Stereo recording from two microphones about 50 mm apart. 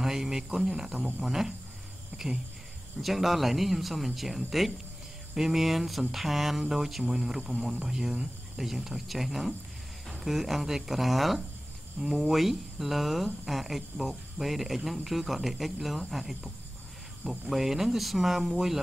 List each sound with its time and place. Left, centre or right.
0.0 s speech: centre
3.0 s speech: centre